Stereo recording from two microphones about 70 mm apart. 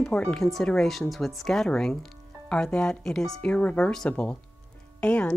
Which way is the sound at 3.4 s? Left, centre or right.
Centre.